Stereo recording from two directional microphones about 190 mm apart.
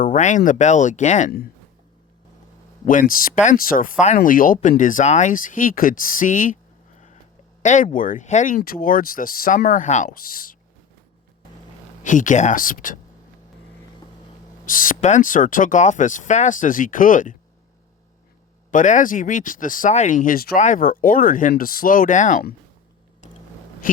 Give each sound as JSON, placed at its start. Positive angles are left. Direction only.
{"t": 0.0, "sound": "speech", "side_deg": 40}
{"t": 2.8, "sound": "speech", "side_deg": 45}
{"t": 7.6, "sound": "speech", "side_deg": 40}
{"t": 12.0, "sound": "speech", "side_deg": 40}
{"t": 14.6, "sound": "speech", "side_deg": 45}
{"t": 18.7, "sound": "speech", "side_deg": 40}
{"t": 23.8, "sound": "speech", "side_deg": 45}